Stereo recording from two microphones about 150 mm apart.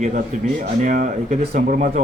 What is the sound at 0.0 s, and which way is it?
A man's voice, 65° right (ahead or behind).